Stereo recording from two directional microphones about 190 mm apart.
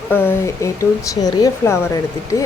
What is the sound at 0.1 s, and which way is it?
Speech, 10° left (ahead or behind).